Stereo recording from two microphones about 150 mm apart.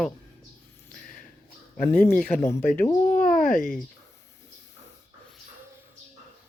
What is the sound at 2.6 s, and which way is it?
Speech, 65° left (ahead or behind).